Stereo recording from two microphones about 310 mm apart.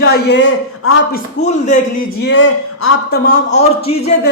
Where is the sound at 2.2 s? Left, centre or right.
Left.